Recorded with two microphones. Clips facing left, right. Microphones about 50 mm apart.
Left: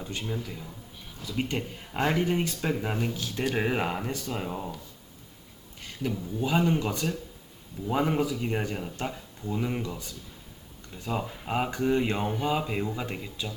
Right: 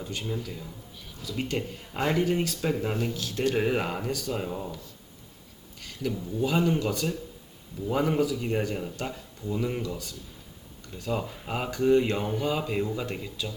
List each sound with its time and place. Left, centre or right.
0.1 s speech: centre
2.1 s speech: left
6.0 s speech: centre
10.9 s speech: centre